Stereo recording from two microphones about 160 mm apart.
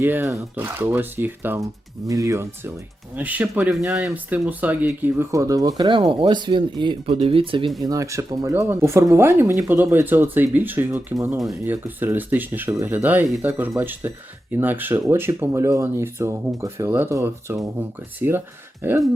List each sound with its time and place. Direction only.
0.0 s speech: 15° right (ahead or behind); by 7.7 s 35° right (ahead or behind)
7.8 s speech: 20° right (ahead or behind)